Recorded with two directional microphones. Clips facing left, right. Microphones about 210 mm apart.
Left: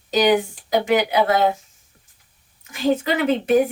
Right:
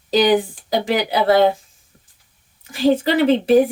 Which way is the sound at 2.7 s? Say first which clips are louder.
Right 4 dB; 35° right (ahead or behind).